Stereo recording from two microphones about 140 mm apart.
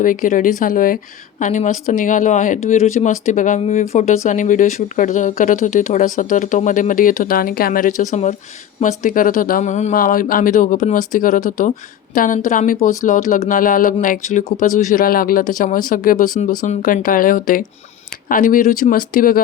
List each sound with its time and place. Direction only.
0.0 s speech: 75° left (ahead or behind)
1.4 s speech: 60° left (ahead or behind)
8.8 s speech: 70° left (ahead or behind); by 19.4 s 85° left